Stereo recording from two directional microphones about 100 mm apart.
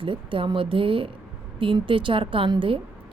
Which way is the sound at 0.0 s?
60° right (ahead or behind).